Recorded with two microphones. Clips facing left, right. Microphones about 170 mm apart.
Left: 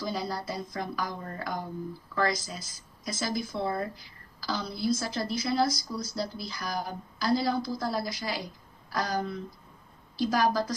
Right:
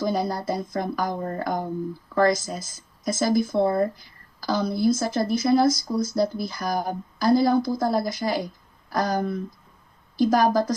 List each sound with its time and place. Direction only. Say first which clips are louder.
0.0 s speech: right 8 dB; 50° right (ahead or behind)